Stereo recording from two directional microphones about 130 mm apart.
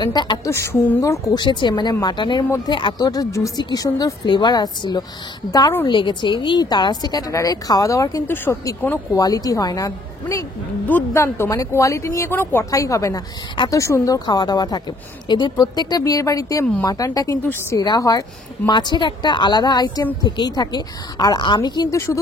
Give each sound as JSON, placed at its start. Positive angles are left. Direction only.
{"t": 0.0, "sound": "a woman's voice", "side_deg": 35}
{"t": 0.5, "sound": "a woman's voice", "side_deg": 20}
{"t": 5.9, "sound": "a woman's voice", "side_deg": 40}